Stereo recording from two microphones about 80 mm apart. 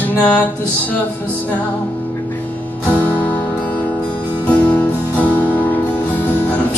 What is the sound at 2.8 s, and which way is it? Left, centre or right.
Music, centre.